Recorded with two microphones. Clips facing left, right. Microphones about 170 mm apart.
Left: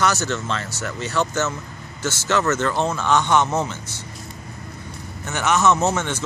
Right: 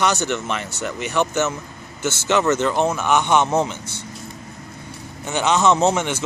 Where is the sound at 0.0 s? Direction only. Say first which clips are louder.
Right 1 dB; 15° right (ahead or behind).